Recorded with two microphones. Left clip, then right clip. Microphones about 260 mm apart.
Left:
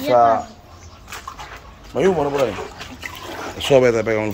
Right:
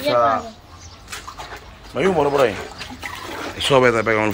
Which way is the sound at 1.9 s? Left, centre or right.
Centre.